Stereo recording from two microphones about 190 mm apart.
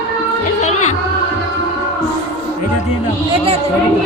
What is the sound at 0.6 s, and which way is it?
Speech, 35° left (ahead or behind).